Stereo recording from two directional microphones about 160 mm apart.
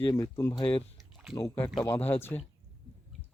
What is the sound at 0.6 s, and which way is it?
Speech, 35° left (ahead or behind).